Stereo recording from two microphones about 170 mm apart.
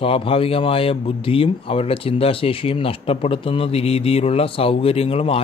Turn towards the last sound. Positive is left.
turn(degrees=35)  # may be behind; listen again after turning